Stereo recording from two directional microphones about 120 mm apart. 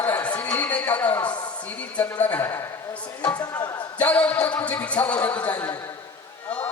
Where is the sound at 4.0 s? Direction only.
10° left (ahead or behind).